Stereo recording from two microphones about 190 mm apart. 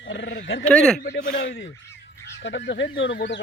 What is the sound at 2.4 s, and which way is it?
Speech, 70° left (ahead or behind).